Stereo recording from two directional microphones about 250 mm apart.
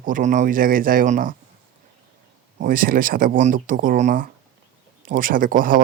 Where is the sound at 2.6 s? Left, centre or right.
Right.